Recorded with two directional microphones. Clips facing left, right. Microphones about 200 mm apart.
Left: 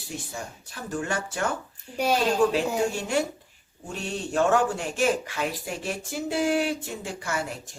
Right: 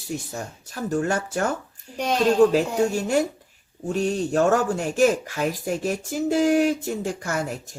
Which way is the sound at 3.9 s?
40° right (ahead or behind).